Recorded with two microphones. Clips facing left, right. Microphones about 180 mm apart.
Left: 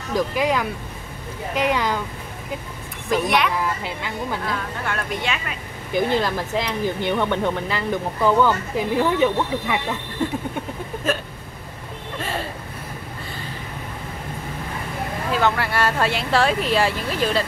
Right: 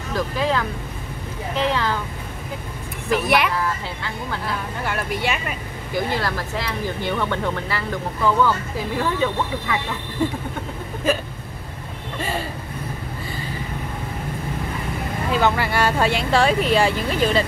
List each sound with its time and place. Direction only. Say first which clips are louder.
0.1 s speech: left 2 dB; 15° left (ahead or behind)
3.1 s speech: right 1 dB; 5° right (ahead or behind)
3.5 s speech: even; 15° left (ahead or behind)
4.8 s speech: right 3 dB; 5° right (ahead or behind)
6.1 s speech: left 3 dB; 15° left (ahead or behind)
12.2 s a sound: right 2 dB; centre (ahead or behind)
15.3 s speech: right 1 dB; centre (ahead or behind)